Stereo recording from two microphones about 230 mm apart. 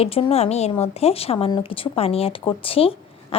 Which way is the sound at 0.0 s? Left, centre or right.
Left.